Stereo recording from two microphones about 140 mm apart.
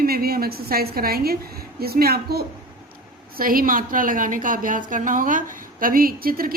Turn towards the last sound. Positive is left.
turn(degrees=-90)